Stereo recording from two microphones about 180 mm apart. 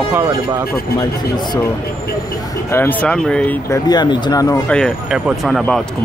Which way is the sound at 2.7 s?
10° left (ahead or behind).